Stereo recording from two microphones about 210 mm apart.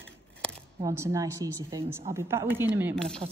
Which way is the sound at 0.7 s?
15° right (ahead or behind).